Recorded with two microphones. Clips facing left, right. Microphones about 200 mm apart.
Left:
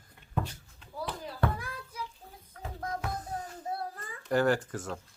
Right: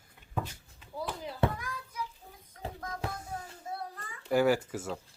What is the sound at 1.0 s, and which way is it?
Chop, 20° right (ahead or behind).